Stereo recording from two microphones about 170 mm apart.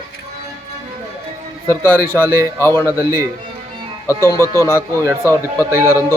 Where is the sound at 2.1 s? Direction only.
15° left (ahead or behind).